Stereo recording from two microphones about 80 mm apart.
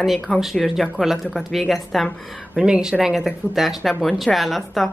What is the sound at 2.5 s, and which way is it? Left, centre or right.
A woman's voice, centre.